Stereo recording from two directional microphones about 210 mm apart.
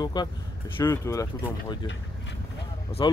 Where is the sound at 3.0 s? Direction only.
20° left (ahead or behind).